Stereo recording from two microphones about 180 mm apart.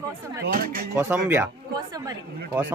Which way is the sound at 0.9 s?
10° right (ahead or behind).